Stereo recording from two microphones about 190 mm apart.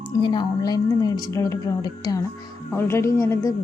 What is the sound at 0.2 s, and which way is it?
A woman's voice, 25° left (ahead or behind).